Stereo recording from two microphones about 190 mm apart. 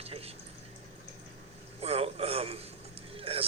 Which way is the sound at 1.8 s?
35° right (ahead or behind).